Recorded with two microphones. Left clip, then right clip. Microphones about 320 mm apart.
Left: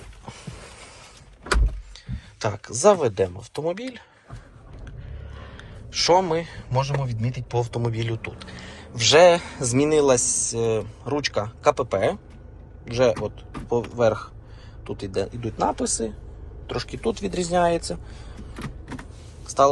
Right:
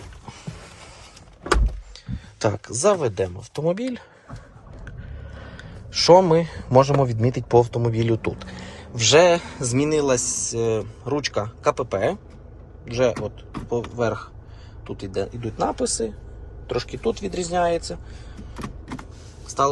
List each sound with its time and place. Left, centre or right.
2.0 s a man's voice: centre
5.4 s a man's voice: centre
7.6 s a man's voice: centre
17.5 s speech: centre